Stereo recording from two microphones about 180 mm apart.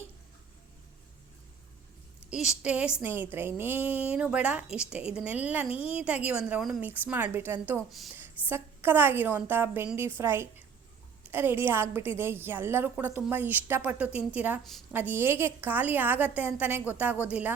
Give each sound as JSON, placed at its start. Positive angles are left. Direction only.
{"t": 2.3, "sound": "a woman's voice", "side_deg": -5}
{"t": 5.7, "sound": "a woman's voice", "side_deg": 30}
{"t": 6.0, "sound": "a woman's voice", "side_deg": -10}
{"t": 14.6, "sound": "a woman's voice", "side_deg": 0}
{"t": 14.9, "sound": "a woman's voice", "side_deg": -10}